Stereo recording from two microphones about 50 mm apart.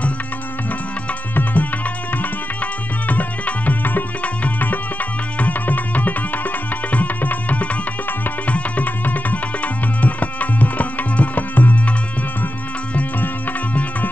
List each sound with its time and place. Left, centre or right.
1.3 s music: left
12.9 s music: left